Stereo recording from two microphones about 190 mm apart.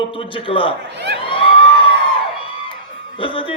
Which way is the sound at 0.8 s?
65° right (ahead or behind).